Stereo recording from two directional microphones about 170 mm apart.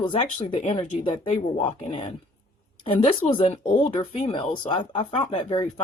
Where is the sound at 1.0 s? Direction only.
30° left (ahead or behind).